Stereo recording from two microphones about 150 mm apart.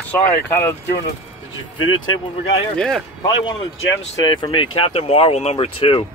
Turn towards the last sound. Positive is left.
turn(degrees=40)  # may be behind; listen again after turning